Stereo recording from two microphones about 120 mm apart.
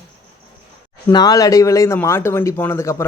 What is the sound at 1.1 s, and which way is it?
A man's voice, 35° left (ahead or behind).